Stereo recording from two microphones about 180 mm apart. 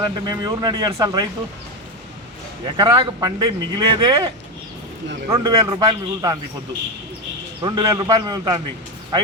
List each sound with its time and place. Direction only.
0.0 s speech: 25° right (ahead or behind)
2.7 s speech: 25° right (ahead or behind)
5.3 s speech: 25° right (ahead or behind)
7.6 s speech: 20° right (ahead or behind)